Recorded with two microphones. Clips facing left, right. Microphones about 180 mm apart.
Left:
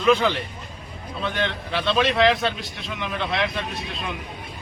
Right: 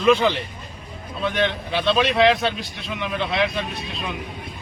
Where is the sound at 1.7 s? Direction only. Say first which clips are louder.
Even; centre (ahead or behind).